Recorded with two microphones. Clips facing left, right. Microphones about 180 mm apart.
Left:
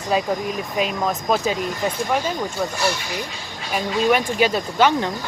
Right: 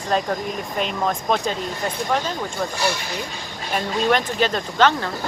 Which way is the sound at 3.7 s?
10° left (ahead or behind).